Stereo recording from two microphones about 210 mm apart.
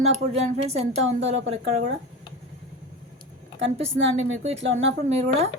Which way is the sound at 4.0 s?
65° right (ahead or behind).